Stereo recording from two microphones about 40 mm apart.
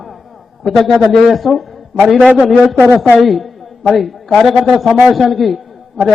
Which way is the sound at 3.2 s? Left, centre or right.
Centre.